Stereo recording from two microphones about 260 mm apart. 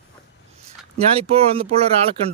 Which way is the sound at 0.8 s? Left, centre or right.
Centre.